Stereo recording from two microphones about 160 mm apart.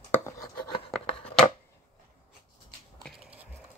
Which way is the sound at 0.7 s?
35° left (ahead or behind).